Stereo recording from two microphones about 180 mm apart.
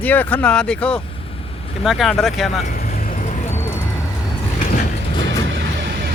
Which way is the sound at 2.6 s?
55° left (ahead or behind).